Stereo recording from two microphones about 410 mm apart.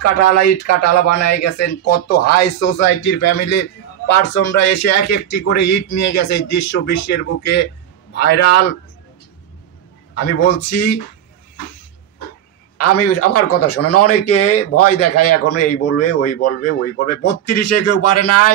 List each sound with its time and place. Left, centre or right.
0.0 s speech: left
10.7 s speech: left
12.7 s speech: left